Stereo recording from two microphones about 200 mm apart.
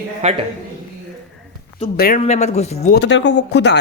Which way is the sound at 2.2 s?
35° left (ahead or behind).